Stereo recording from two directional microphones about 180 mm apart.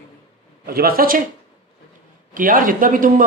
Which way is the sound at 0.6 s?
55° right (ahead or behind).